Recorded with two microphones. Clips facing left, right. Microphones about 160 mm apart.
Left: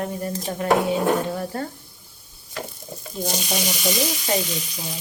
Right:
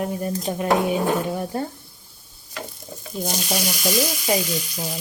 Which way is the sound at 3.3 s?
Centre (ahead or behind).